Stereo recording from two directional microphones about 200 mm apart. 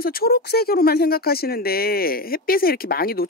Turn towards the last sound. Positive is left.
turn(degrees=50)  # may be behind; listen again after turning